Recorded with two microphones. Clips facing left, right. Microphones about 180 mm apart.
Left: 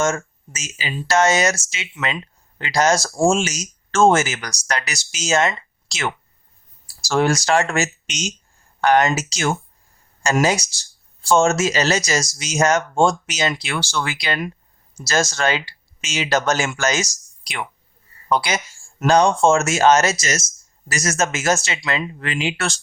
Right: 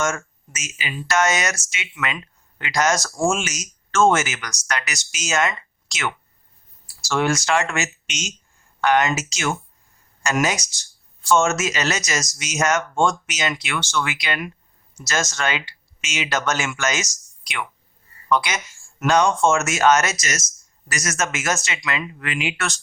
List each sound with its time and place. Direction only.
0.0 s speech: 30° left (ahead or behind)